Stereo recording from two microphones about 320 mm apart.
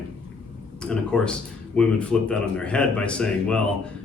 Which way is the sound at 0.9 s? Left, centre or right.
Centre.